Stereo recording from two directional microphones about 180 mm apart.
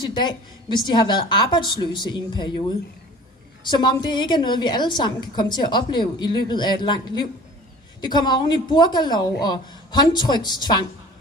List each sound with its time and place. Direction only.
0.0 s a woman's voice: 25° left (ahead or behind)
3.6 s a woman's voice: 25° left (ahead or behind)